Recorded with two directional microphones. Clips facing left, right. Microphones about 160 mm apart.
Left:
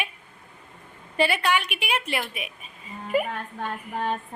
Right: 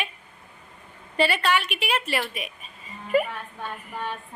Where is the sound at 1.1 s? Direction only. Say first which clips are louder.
Even; 10° left (ahead or behind).